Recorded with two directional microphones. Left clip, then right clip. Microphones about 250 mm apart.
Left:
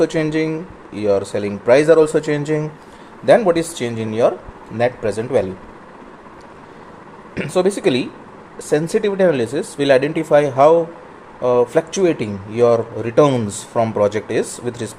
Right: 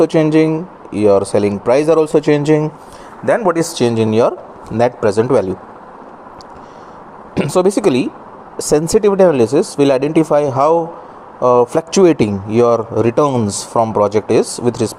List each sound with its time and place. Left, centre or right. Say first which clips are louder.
0.0 s a man's voice: right 6 dB; centre
7.3 s a man's voice: right 4 dB; right